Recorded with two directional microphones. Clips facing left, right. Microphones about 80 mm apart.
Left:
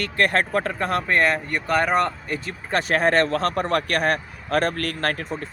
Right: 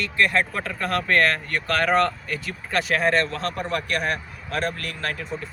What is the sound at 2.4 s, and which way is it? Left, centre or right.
Speech, left.